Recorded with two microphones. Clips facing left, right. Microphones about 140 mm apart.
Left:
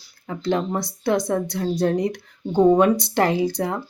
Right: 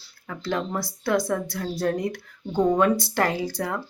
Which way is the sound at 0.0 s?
20° left (ahead or behind).